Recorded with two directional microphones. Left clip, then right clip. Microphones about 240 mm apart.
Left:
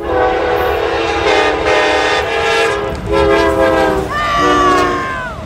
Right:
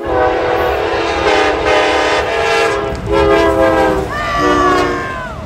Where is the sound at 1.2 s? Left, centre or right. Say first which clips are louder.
Even; centre.